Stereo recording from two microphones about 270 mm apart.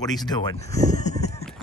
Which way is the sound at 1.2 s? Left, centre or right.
Left.